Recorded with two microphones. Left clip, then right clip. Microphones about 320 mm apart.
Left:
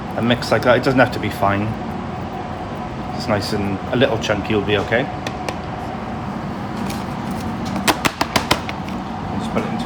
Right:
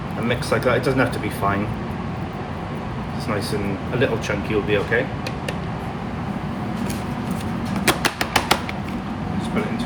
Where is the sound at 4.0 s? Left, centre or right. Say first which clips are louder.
Left 4 dB; left.